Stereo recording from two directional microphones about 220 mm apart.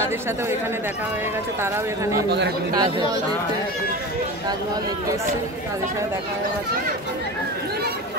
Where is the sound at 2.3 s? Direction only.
50° right (ahead or behind).